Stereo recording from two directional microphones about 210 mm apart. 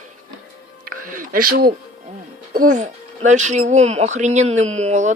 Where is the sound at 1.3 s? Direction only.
45° right (ahead or behind).